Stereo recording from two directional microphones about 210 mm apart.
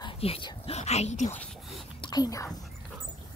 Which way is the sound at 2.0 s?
20° left (ahead or behind).